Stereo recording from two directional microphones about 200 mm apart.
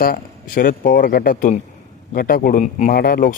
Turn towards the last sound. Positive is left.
turn(degrees=50)  # may be behind; listen again after turning